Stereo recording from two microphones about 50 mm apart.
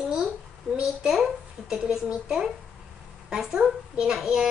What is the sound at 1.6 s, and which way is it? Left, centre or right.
A child's voice, centre.